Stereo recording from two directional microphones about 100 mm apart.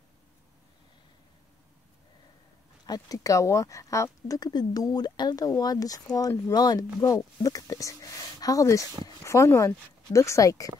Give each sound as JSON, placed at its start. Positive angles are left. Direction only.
{"t": 2.9, "sound": "speech", "side_deg": 35}
{"t": 4.4, "sound": "speech", "side_deg": 40}